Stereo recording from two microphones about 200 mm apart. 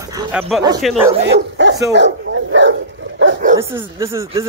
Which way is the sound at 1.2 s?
60° right (ahead or behind).